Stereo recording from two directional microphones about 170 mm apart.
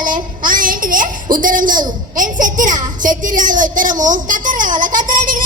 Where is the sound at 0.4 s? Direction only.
55° right (ahead or behind).